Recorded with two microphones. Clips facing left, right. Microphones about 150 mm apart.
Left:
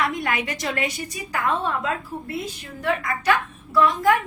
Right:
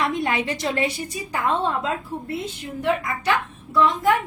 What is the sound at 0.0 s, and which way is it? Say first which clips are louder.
A woman's voice: right 2 dB; 30° right (ahead or behind).